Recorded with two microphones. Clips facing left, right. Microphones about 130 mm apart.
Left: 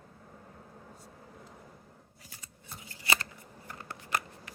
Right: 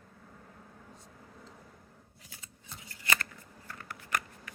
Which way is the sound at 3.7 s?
25° left (ahead or behind).